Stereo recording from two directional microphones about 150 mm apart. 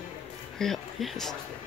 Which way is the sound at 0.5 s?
Centre (ahead or behind).